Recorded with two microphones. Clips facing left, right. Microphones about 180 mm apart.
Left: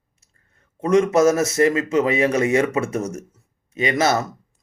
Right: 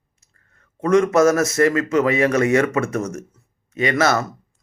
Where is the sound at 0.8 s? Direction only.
20° left (ahead or behind).